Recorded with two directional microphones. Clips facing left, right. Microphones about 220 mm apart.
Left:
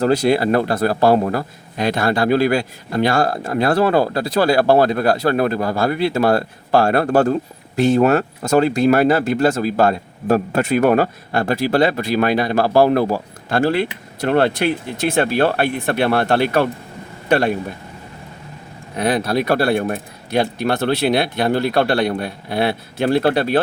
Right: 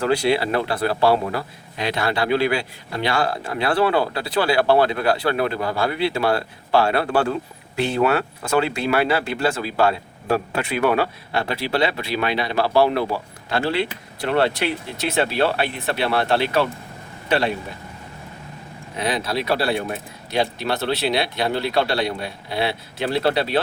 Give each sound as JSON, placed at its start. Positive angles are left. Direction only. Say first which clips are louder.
{"t": 0.0, "sound": "speech", "louder": "left 4 dB", "side_deg": 45}
{"t": 18.9, "sound": "speech", "louder": "left 6 dB", "side_deg": 50}